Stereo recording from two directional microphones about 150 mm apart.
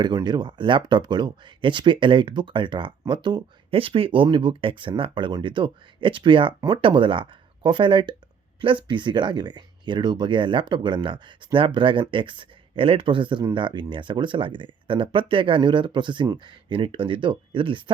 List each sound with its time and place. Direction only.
0.0 s speech: 25° right (ahead or behind)